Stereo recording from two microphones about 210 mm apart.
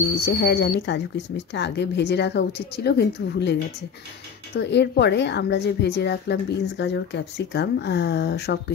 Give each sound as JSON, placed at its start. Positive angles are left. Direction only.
{"t": 0.2, "sound": "a woman's voice", "side_deg": 50}
{"t": 4.6, "sound": "a woman's voice", "side_deg": 55}